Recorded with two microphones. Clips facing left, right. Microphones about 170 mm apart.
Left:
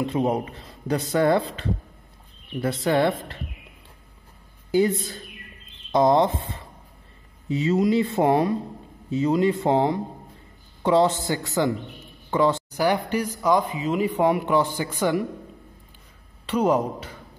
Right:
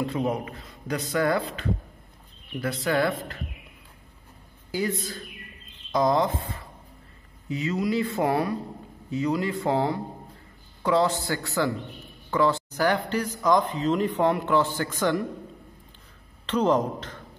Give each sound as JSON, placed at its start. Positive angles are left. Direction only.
{"t": 0.0, "sound": "speech", "side_deg": 25}
{"t": 4.6, "sound": "speech", "side_deg": 25}
{"t": 16.4, "sound": "speech", "side_deg": 10}